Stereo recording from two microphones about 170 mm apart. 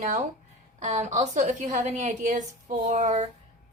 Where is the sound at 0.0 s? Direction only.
45° right (ahead or behind).